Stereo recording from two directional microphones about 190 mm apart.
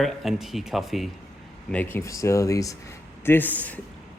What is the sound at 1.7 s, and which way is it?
Speech, 10° left (ahead or behind).